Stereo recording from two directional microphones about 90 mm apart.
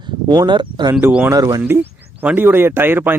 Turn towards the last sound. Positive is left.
turn(degrees=-25)  # may be behind; listen again after turning